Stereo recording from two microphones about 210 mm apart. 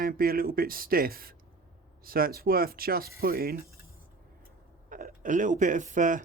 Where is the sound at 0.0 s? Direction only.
45° right (ahead or behind).